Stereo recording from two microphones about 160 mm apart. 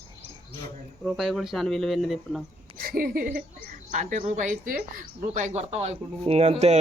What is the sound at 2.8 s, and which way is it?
A woman's voice, 65° right (ahead or behind).